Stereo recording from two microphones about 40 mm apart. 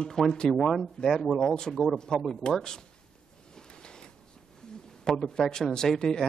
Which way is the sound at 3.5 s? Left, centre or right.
Centre.